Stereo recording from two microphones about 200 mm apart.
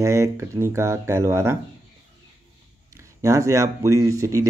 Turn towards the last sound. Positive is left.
turn(degrees=-15)  # may be behind; listen again after turning